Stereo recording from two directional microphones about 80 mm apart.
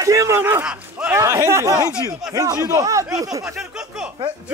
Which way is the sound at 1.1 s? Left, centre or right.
Right.